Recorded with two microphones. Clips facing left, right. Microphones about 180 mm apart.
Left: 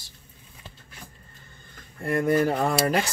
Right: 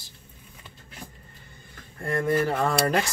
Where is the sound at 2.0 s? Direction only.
10° left (ahead or behind).